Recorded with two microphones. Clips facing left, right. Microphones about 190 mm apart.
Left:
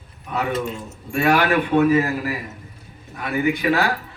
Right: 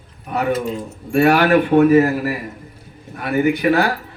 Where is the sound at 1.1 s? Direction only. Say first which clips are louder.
Right 5 dB; 55° right (ahead or behind).